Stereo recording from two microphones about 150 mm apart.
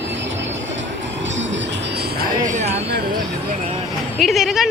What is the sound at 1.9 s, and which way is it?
Music, 90° right.